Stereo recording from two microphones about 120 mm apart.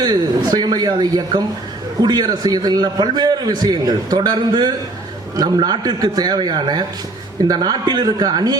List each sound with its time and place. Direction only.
0.0 s a man's voice: 35° right (ahead or behind)